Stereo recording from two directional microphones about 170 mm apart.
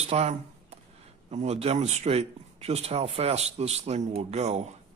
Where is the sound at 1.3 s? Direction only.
40° right (ahead or behind).